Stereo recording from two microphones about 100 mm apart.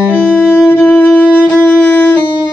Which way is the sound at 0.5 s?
20° left (ahead or behind).